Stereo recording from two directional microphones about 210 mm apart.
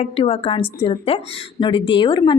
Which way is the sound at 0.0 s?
30° left (ahead or behind).